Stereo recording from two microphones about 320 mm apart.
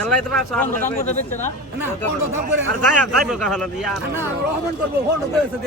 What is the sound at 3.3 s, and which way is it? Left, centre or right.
Speech, centre.